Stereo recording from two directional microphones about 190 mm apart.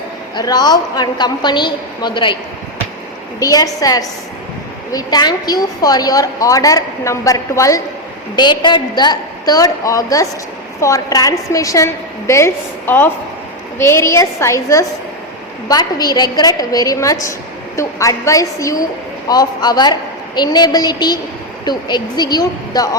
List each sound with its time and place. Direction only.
0.3 s a woman's voice: 20° left (ahead or behind)
3.4 s a woman's voice: 20° left (ahead or behind)